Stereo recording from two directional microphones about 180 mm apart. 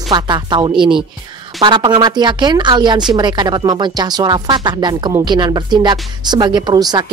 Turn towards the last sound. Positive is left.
turn(degrees=-20)  # may be behind; listen again after turning